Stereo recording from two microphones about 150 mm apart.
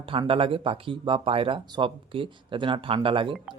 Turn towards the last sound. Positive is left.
turn(degrees=-35)  # may be behind; listen again after turning